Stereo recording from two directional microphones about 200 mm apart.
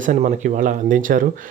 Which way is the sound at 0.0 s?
40° right (ahead or behind).